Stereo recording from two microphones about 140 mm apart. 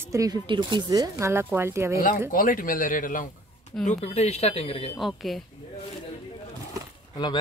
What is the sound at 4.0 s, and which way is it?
Speech, 50° left (ahead or behind).